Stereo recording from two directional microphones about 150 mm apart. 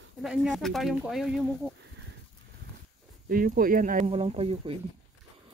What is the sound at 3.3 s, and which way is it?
Speech, 70° right (ahead or behind).